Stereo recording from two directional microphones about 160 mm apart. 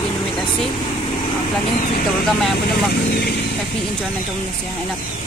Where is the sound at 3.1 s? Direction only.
85° left.